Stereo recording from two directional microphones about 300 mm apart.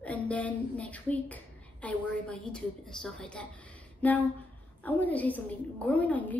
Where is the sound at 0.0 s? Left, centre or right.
Centre.